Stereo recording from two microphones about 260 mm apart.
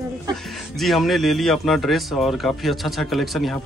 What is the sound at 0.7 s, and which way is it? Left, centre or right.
Speech, centre.